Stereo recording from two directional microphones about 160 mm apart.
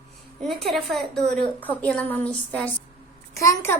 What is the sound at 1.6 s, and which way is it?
Child singing, 10° left (ahead or behind).